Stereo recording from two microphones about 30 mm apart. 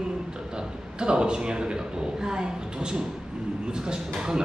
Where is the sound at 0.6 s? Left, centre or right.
Right.